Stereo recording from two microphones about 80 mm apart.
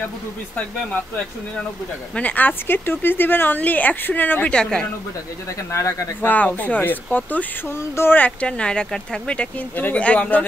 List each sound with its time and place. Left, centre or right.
2.1 s speech: centre
4.6 s speech: centre
5.7 s speech: left
6.2 s speech: left